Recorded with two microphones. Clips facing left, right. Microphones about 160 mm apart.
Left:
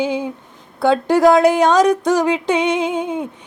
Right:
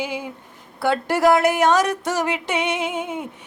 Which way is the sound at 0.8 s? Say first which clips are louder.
Left 5 dB; 20° left (ahead or behind).